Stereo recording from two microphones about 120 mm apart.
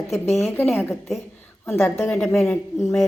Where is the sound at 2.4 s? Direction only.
20° left (ahead or behind).